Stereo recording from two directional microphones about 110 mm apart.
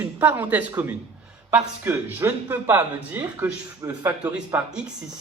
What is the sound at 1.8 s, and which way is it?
Speech, 20° right (ahead or behind).